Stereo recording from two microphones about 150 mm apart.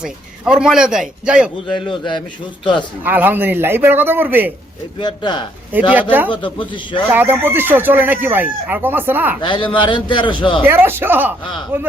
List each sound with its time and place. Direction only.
0.0 s a man's voice: 5° right (ahead or behind)
1.6 s a man's voice: 30° left (ahead or behind)
3.0 s speech: 10° right (ahead or behind)
4.9 s speech: 30° left (ahead or behind)
5.9 s speech: 10° right (ahead or behind)
6.3 s a man's voice: 30° left (ahead or behind)
7.1 s speech: 15° right (ahead or behind)
9.4 s a man's voice: 35° left (ahead or behind)
10.6 s speech: 15° right (ahead or behind)